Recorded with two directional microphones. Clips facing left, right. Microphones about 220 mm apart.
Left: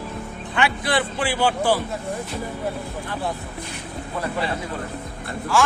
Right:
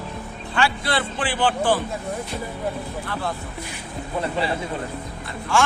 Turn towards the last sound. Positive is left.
turn(degrees=0)  # may be behind; listen again after turning